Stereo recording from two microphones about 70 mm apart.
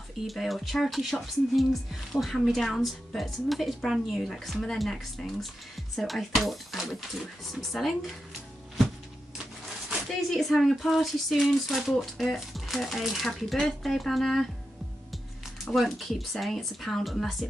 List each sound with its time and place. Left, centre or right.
0.3 s speech: centre
9.4 s a sound: centre
10.3 s speech: centre
15.6 s speech: centre